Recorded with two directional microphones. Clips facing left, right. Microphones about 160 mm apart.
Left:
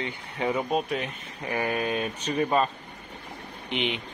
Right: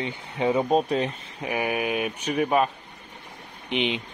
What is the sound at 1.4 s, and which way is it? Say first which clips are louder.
Speech: right 1 dB; 15° right (ahead or behind).